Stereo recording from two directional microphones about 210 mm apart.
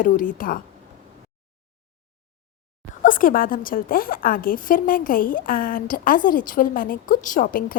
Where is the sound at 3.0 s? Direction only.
40° left (ahead or behind).